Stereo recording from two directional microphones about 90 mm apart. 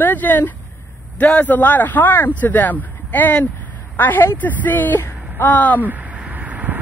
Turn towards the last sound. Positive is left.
turn(degrees=-20)  # may be behind; listen again after turning